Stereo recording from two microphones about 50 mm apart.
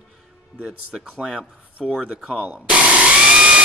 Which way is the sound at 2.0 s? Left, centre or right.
Centre.